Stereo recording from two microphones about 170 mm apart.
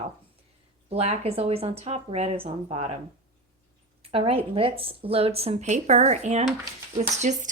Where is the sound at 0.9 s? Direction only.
40° right (ahead or behind).